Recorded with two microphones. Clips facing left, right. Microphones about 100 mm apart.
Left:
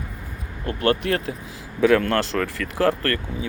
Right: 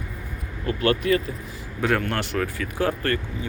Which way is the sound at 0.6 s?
45° left (ahead or behind).